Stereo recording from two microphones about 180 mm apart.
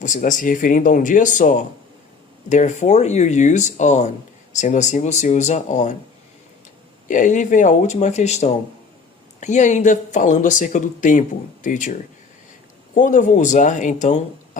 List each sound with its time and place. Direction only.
0.0 s speech: 45° left (ahead or behind)
7.1 s speech: 45° left (ahead or behind)